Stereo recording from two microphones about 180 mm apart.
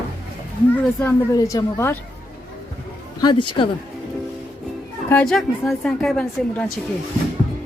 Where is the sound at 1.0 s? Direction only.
15° left (ahead or behind).